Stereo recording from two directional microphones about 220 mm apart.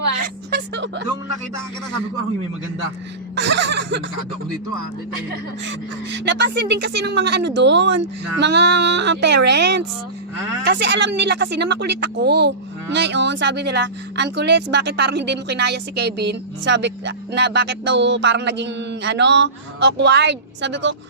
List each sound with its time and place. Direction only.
0.5 s music: 50° right (ahead or behind)
3.3 s speech: 55° right (ahead or behind)
5.6 s speech: 55° right (ahead or behind)